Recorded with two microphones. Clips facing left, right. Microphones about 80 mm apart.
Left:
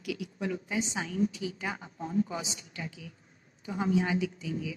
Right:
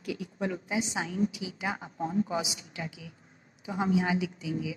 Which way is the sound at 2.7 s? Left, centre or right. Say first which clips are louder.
Right 2 dB; centre.